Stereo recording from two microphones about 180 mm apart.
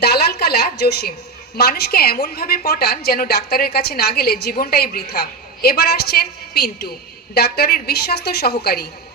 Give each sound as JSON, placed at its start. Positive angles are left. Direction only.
{"t": 0.0, "sound": "a woman's voice", "side_deg": 65}